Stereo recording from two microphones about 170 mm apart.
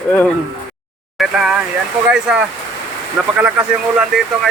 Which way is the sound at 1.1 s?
5° right (ahead or behind).